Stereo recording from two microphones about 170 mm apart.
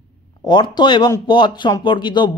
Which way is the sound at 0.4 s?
25° left (ahead or behind).